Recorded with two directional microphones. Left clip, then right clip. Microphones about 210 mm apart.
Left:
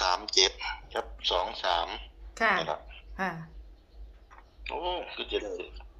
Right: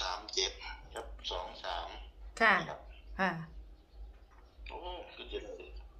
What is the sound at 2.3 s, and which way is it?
Speech, centre (ahead or behind).